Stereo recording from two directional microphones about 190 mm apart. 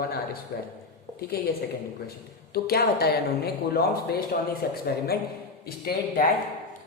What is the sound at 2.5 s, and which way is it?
A man's voice, 55° left (ahead or behind).